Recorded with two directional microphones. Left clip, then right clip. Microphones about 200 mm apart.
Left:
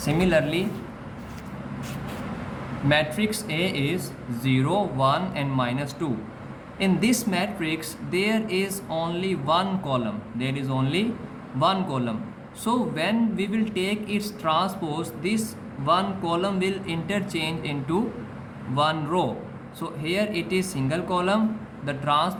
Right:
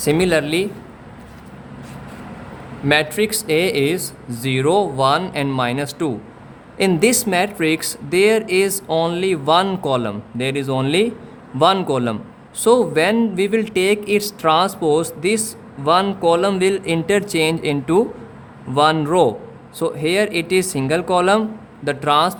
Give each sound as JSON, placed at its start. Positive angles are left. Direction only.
{"t": 0.0, "sound": "speech", "side_deg": -55}
{"t": 2.9, "sound": "speech", "side_deg": -55}